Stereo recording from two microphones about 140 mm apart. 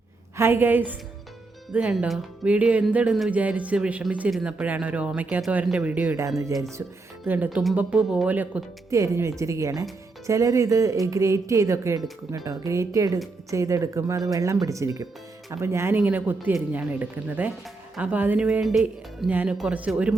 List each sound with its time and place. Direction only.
0.3 s speech: 15° right (ahead or behind); by 19.3 s centre (ahead or behind)
19.3 s speech: 10° right (ahead or behind)